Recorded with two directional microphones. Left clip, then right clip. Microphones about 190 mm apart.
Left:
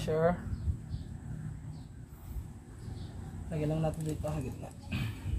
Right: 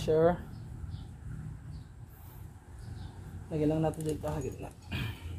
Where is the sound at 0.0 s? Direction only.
25° right (ahead or behind).